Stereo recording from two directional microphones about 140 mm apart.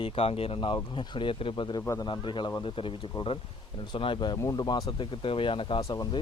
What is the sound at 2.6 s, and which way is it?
Speech, 40° left (ahead or behind).